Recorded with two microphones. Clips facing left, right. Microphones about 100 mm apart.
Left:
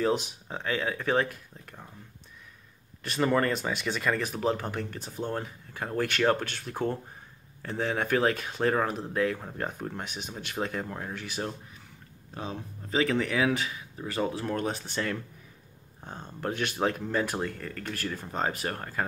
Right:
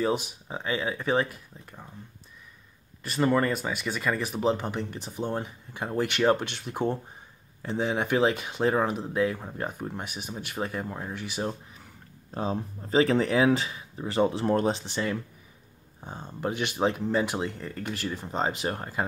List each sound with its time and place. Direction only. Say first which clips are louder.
0.5 s speech: right 1 dB; 10° right (ahead or behind)
3.0 s speech: right 1 dB; 5° right (ahead or behind)
12.4 s speech: right 7 dB; 35° right (ahead or behind)
16.0 s speech: right 3 dB; 10° right (ahead or behind)